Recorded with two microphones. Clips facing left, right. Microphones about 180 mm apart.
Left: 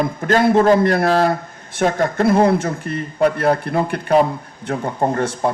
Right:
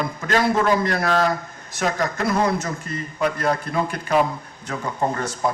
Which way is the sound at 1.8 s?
30° left (ahead or behind).